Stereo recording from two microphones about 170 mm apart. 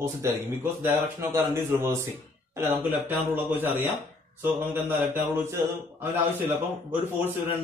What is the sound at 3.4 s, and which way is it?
A man's voice, 10° right (ahead or behind).